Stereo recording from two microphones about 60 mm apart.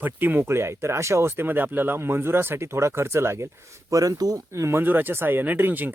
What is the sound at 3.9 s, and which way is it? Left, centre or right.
Speech, right.